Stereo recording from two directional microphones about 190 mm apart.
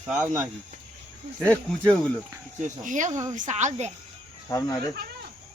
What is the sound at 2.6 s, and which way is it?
Speech, 40° right (ahead or behind).